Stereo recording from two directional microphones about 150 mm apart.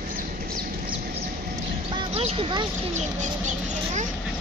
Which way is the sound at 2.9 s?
55° right (ahead or behind).